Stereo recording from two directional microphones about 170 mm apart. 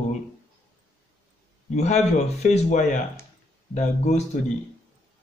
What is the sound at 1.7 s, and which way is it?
Speech, 40° left (ahead or behind).